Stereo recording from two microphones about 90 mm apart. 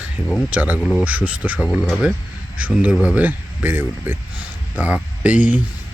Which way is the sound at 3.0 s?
15° right (ahead or behind).